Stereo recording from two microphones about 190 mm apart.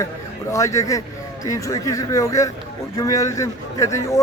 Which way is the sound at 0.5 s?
15° left (ahead or behind).